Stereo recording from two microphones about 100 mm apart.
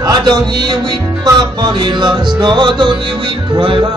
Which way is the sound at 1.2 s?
45° right (ahead or behind).